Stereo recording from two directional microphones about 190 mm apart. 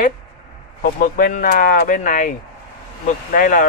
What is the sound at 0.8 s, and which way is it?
Speech, 45° left (ahead or behind).